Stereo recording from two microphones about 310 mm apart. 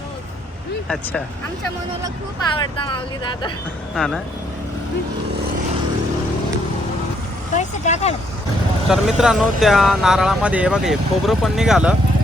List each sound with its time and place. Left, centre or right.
2.6 s speech: centre
3.9 s speech: centre
7.5 s vehicle: left
8.9 s speech: centre